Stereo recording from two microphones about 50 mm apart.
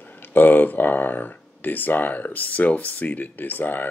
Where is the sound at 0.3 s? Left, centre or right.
Left.